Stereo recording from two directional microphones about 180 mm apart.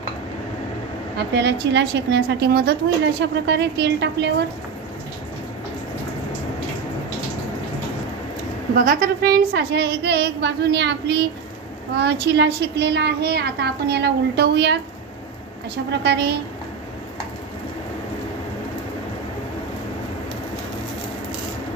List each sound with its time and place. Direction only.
1.1 s a woman's voice: 70° right (ahead or behind)
8.7 s a woman's voice: 50° right (ahead or behind); by 14.8 s 70° right (ahead or behind)
15.9 s a woman's voice: 70° right (ahead or behind)